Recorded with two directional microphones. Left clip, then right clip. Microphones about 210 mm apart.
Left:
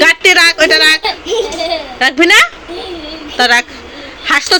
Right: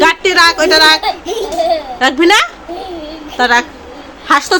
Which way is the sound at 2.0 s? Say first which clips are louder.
Left 3 dB; 10° right (ahead or behind).